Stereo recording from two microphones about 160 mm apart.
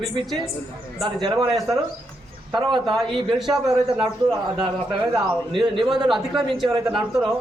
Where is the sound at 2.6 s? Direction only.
30° right (ahead or behind).